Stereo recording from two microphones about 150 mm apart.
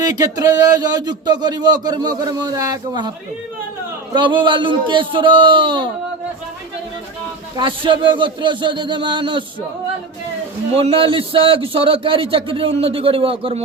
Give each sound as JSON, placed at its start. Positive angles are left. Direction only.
{"t": 0.0, "sound": "a man's voice", "side_deg": -25}
{"t": 4.1, "sound": "a man's voice", "side_deg": -30}
{"t": 7.5, "sound": "a man's voice", "side_deg": -30}
{"t": 10.8, "sound": "a man's voice", "side_deg": -35}